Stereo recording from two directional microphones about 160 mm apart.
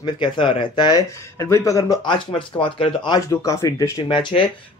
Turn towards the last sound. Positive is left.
turn(degrees=30)  # may be behind; listen again after turning